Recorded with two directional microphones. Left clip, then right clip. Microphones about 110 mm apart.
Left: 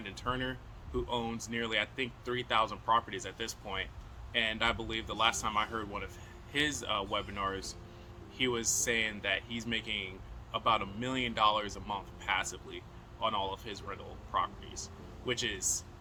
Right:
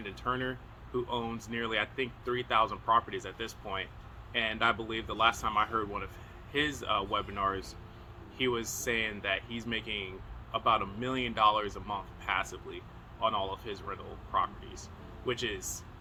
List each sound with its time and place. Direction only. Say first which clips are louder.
0.0 s speech: right 2 dB; 25° left (ahead or behind)